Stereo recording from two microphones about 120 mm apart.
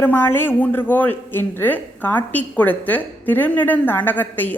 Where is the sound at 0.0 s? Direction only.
15° left (ahead or behind).